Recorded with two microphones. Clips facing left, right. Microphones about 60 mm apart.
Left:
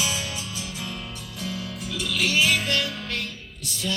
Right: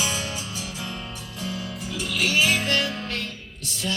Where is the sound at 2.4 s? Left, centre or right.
Right.